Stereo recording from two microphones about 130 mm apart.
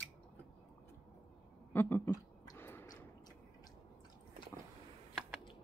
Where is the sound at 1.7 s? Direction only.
15° left (ahead or behind).